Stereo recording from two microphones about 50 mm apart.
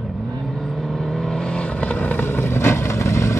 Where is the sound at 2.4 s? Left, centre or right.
Left.